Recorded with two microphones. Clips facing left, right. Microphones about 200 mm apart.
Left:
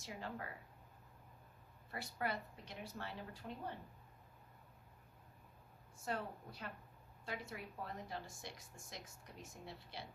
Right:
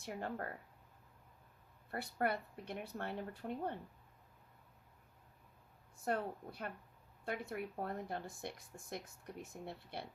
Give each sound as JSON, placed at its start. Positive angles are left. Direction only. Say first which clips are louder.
{"t": 0.0, "sound": "speech", "louder": "right 5 dB", "side_deg": -55}
{"t": 1.9, "sound": "speech", "louder": "right 5 dB", "side_deg": -55}
{"t": 6.1, "sound": "speech", "louder": "right 5 dB", "side_deg": -55}